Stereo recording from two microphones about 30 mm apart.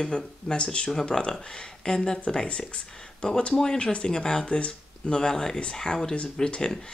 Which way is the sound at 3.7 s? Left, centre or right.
Left.